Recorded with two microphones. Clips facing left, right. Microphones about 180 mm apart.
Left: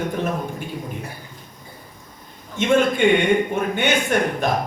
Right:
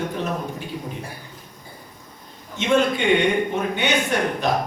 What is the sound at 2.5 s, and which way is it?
Speech, 50° left (ahead or behind).